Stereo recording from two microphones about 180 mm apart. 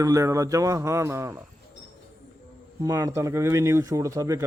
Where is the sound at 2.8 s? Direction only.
20° right (ahead or behind).